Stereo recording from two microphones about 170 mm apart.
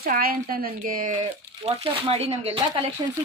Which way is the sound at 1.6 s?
35° right (ahead or behind).